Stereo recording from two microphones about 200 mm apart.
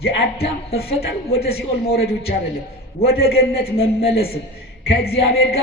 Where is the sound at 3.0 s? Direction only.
50° left (ahead or behind).